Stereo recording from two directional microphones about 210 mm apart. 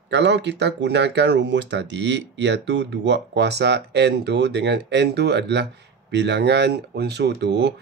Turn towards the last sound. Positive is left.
turn(degrees=-55)  # may be behind; listen again after turning